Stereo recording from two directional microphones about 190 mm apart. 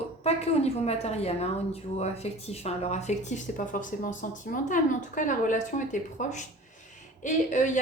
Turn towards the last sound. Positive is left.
turn(degrees=40)  # may be behind; listen again after turning